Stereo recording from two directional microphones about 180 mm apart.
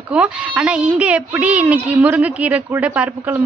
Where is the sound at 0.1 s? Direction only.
5° right (ahead or behind).